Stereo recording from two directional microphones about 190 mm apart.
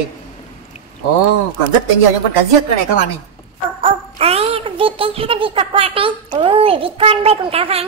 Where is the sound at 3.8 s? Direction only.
30° right (ahead or behind).